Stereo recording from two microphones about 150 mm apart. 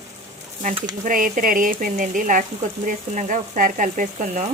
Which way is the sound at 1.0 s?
65° right (ahead or behind).